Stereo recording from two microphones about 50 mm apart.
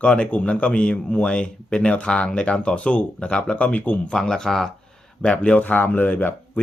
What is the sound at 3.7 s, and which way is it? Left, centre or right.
Speech, left.